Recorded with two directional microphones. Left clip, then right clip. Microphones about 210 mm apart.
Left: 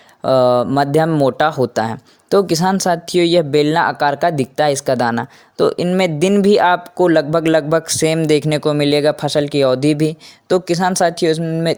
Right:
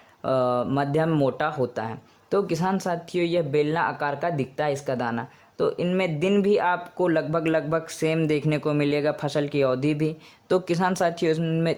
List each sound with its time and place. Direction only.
0.2 s speech: 30° left (ahead or behind)